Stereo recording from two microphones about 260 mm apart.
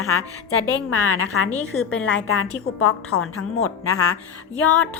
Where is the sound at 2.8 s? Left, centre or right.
Left.